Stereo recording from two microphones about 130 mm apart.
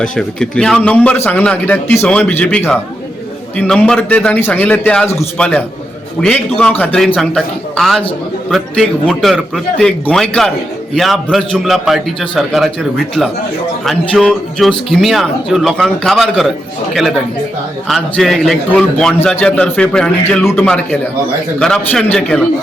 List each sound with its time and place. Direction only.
0.0 s a man's voice: 5° left (ahead or behind)
14.1 s a man's voice: 5° left (ahead or behind)